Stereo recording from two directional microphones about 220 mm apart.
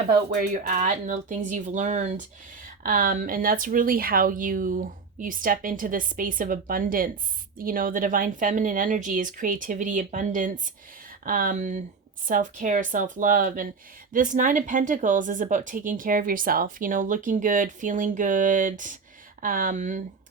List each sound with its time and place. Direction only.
0.3 s speech: 35° right (ahead or behind)